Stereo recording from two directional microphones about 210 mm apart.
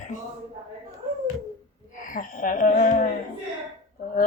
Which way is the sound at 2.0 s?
40° left (ahead or behind).